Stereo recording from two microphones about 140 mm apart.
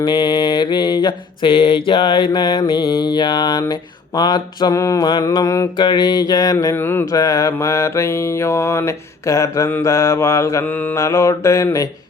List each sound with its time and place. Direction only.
0.0 s mantra: 30° left (ahead or behind)
5.7 s mantra: 35° left (ahead or behind)